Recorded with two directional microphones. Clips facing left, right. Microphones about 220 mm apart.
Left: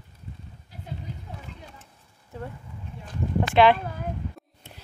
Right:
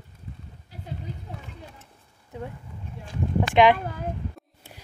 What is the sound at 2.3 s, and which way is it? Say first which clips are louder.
Speech: right 1 dB; 20° right (ahead or behind).